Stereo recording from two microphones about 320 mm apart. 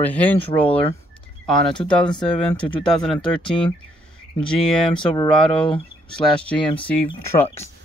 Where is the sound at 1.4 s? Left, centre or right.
Centre.